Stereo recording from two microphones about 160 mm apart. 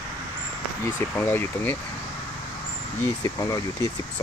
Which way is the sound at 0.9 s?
15° left (ahead or behind).